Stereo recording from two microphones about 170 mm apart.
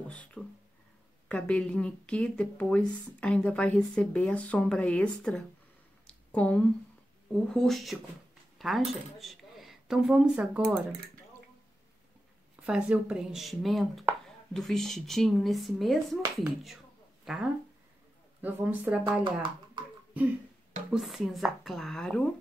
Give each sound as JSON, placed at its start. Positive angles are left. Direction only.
{"t": 0.1, "sound": "speech", "side_deg": 5}
{"t": 6.0, "sound": "a sound", "side_deg": 5}
{"t": 7.3, "sound": "speech", "side_deg": 5}
{"t": 12.6, "sound": "speech", "side_deg": -5}
{"t": 17.2, "sound": "a sound", "side_deg": -5}
{"t": 18.4, "sound": "speech", "side_deg": -10}
{"t": 20.9, "sound": "speech", "side_deg": 0}